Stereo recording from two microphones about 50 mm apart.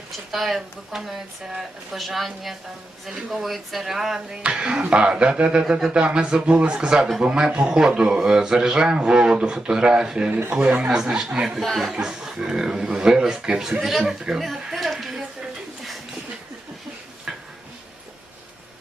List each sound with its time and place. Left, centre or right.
0.3 s speech: centre
4.3 s a sound: centre
7.2 s a man's voice: centre
11.6 s speech: centre
11.9 s a man's voice: centre
14.4 s music: centre
17.3 s a sound: centre